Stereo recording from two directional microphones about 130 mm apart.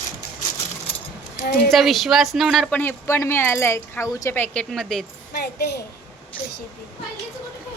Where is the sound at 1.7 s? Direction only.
Centre (ahead or behind); by 4.4 s 25° left (ahead or behind).